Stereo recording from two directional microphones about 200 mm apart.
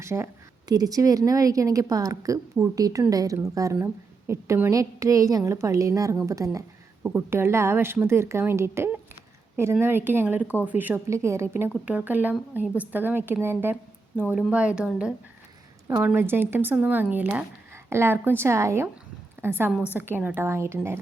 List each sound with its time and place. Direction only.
0.0 s a woman's voice: 15° right (ahead or behind)